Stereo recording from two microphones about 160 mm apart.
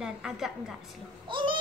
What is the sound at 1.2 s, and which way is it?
Speech, 30° right (ahead or behind).